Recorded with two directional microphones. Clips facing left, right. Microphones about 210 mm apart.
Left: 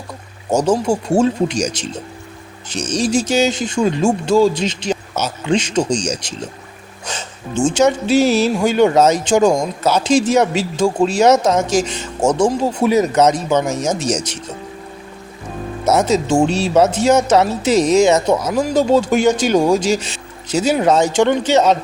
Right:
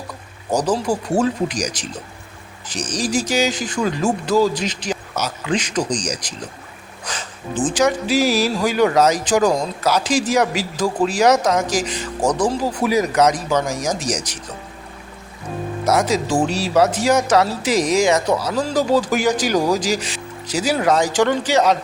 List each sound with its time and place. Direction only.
0.5 s speech: 25° left (ahead or behind)
7.0 s a sound: 25° left (ahead or behind)
7.6 s speech: 25° left (ahead or behind)
15.9 s speech: 25° left (ahead or behind)